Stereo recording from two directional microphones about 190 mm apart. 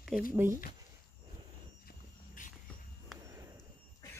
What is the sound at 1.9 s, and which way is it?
Walk, 45° left (ahead or behind).